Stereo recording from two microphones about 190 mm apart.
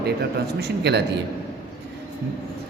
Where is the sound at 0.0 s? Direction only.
60° right (ahead or behind).